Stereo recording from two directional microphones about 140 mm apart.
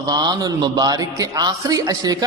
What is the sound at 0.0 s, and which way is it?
A man's voice, 30° right (ahead or behind).